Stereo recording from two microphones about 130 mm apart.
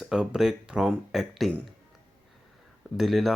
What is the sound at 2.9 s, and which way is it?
Speech, centre (ahead or behind).